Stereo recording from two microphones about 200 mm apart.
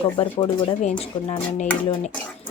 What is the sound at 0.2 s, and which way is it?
A woman's voice, 25° left (ahead or behind).